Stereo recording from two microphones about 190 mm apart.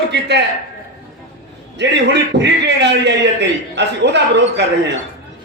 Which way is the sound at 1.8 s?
65° right (ahead or behind).